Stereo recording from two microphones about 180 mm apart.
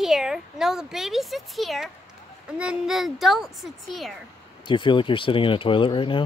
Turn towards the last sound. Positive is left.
turn(degrees=25)  # may be behind; listen again after turning